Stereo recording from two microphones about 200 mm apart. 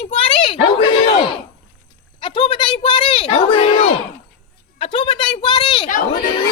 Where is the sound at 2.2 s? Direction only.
25° left (ahead or behind).